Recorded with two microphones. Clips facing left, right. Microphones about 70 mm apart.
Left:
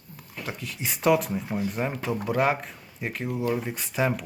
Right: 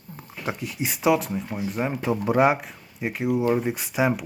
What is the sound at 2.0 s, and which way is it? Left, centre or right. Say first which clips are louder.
Speech: right 5 dB; right.